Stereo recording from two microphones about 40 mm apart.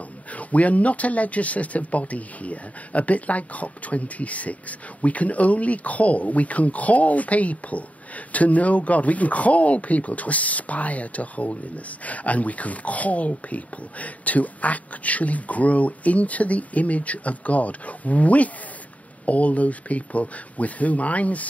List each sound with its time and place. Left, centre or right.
0.3 s speech: left